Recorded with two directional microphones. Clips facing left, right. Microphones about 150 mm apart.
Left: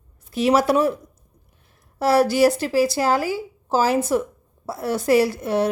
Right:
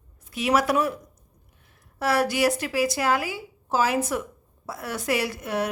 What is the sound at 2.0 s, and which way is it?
A woman's voice, 35° left (ahead or behind).